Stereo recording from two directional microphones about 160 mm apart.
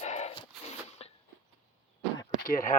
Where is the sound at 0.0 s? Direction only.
45° left (ahead or behind).